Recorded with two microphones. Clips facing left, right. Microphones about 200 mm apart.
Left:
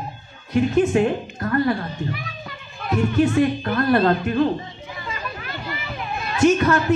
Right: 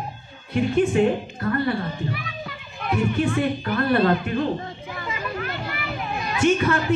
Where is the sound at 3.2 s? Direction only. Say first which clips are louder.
Left 4 dB; 40° left (ahead or behind).